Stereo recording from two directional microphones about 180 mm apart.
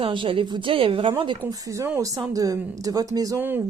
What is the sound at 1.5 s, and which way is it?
Speech, 20° right (ahead or behind).